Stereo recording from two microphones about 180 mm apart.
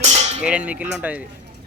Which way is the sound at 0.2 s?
35° right (ahead or behind).